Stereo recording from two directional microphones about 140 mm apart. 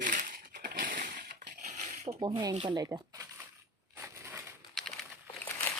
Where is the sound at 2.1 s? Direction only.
30° right (ahead or behind).